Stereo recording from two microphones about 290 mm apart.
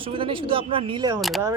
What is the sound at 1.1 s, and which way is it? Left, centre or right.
Speech, centre.